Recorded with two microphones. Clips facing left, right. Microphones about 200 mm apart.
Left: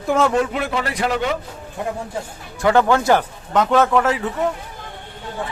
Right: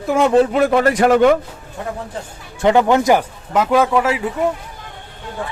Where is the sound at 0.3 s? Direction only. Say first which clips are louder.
Right 7 dB; 40° right (ahead or behind).